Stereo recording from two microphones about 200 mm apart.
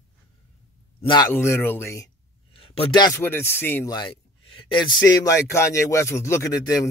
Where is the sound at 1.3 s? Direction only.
10° left (ahead or behind).